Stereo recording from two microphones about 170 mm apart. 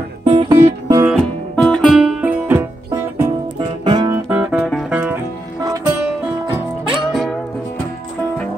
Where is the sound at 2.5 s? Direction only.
15° right (ahead or behind).